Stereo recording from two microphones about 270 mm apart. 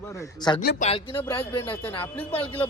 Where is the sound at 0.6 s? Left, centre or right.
Left.